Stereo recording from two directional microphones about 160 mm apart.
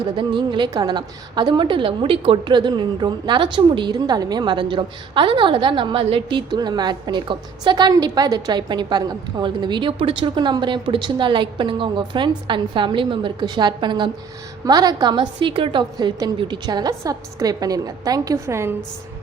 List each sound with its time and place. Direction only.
0.0 s a woman's voice: 30° right (ahead or behind)